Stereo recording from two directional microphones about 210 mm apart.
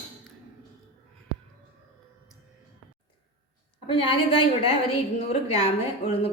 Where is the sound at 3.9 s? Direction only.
25° left (ahead or behind).